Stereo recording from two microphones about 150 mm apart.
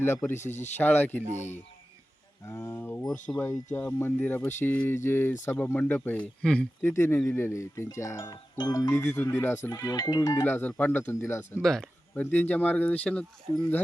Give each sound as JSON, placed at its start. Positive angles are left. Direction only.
{"t": 0.0, "sound": "speech", "side_deg": 15}
{"t": 0.3, "sound": "speech", "side_deg": 50}
{"t": 0.8, "sound": "speech", "side_deg": 10}
{"t": 2.5, "sound": "speech", "side_deg": 15}
{"t": 6.8, "sound": "speech", "side_deg": 15}
{"t": 11.6, "sound": "speech", "side_deg": 5}